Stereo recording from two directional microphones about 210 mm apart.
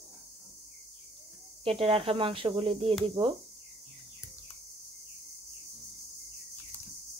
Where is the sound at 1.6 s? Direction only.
25° right (ahead or behind).